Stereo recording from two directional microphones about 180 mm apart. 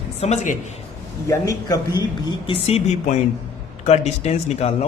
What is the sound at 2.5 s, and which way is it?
Speech, 35° left (ahead or behind).